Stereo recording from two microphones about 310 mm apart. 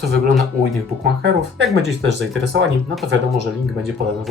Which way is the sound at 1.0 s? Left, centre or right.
Right.